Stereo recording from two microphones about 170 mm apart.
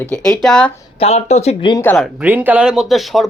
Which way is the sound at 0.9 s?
40° left (ahead or behind).